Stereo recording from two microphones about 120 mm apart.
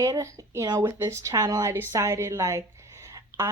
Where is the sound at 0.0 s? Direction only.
25° right (ahead or behind).